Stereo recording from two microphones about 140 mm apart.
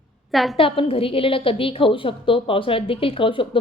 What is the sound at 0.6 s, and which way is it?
A woman's voice, 40° left (ahead or behind).